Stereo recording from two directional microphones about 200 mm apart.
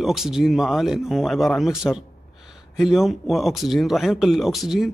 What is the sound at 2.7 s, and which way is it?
Speech, centre (ahead or behind).